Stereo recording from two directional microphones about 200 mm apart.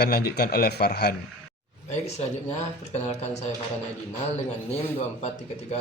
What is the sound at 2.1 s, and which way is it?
Speech, 35° left (ahead or behind).